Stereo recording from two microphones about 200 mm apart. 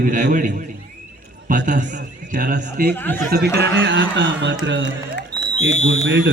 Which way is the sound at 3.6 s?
70° right (ahead or behind).